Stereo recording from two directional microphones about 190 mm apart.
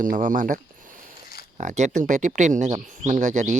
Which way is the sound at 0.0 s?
45° right (ahead or behind).